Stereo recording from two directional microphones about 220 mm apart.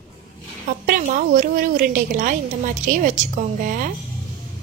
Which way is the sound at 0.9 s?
40° right (ahead or behind).